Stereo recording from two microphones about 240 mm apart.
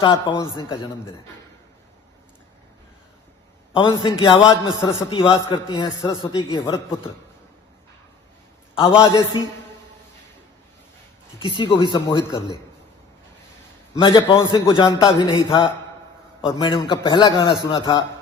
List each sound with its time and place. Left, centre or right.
0.0 s a man's voice: centre
3.8 s a man's voice: centre
8.8 s a man's voice: centre
11.4 s a man's voice: centre
14.0 s a man's voice: centre